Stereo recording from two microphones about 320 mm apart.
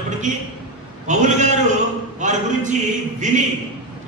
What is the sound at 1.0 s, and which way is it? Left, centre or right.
A man's voice, right.